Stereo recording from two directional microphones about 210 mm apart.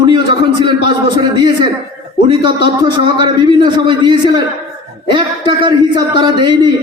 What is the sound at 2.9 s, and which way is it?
A man's voice, 20° right (ahead or behind).